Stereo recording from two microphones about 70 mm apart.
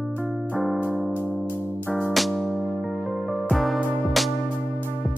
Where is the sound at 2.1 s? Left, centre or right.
Centre.